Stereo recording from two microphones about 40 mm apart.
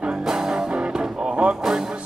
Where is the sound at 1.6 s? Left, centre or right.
Centre.